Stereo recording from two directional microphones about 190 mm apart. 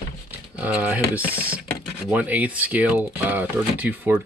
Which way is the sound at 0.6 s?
5° right (ahead or behind).